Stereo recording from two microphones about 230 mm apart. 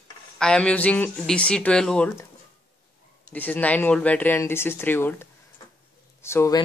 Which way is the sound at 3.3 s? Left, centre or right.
Centre.